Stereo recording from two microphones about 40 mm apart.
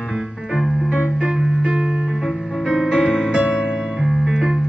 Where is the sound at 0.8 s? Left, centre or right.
Right.